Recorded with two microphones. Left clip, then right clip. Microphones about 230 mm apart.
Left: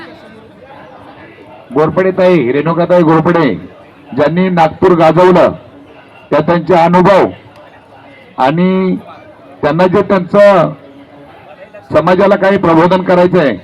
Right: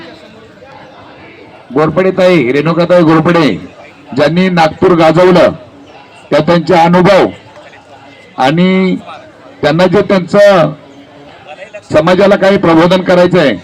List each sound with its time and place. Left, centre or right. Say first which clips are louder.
1.7 s a man's voice: right 1 dB; right
8.4 s a man's voice: right 1 dB; right
11.9 s a man's voice: right 1 dB; right